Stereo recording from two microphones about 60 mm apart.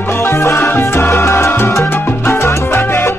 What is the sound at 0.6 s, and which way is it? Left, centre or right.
Salsa music, left.